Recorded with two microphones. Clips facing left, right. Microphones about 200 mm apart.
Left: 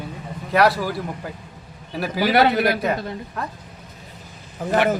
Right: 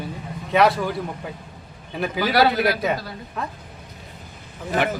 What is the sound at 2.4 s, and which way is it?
A man's voice, centre (ahead or behind).